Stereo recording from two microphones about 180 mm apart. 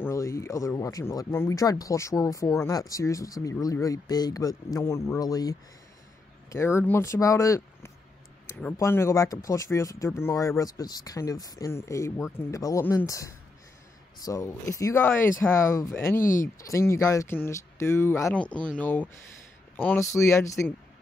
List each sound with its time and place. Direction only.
0.0 s a man's voice: 15° left (ahead or behind)
16.2 s speech: 45° left (ahead or behind)
16.5 s speech: 15° left (ahead or behind)